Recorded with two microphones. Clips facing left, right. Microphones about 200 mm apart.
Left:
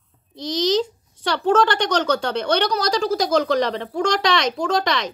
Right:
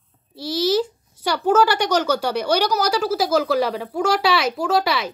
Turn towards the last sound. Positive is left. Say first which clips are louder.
# right 1 dB
turn(degrees=-5)  # may be behind; listen again after turning